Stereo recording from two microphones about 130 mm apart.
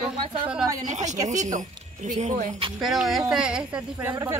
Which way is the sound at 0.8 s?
65° right (ahead or behind).